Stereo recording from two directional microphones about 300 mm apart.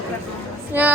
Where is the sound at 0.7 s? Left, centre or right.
Centre.